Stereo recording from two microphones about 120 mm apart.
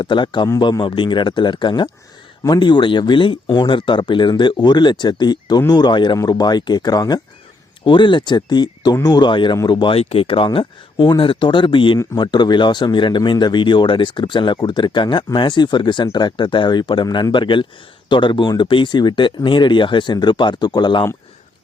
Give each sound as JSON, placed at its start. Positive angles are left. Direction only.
{"t": 0.0, "sound": "speech", "side_deg": 40}
{"t": 9.9, "sound": "speech", "side_deg": 55}